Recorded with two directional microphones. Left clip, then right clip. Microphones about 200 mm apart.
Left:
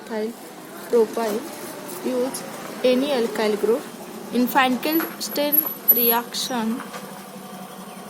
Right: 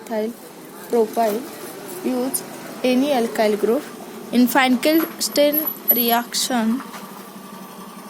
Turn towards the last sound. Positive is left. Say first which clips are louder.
# right 4 dB
turn(degrees=-35)  # may be behind; listen again after turning